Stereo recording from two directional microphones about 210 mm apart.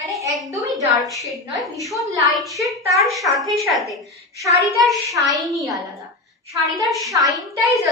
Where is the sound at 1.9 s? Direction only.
15° right (ahead or behind).